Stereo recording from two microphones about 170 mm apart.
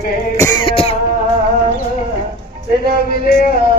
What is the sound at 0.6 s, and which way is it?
Throat clearing, 35° left (ahead or behind).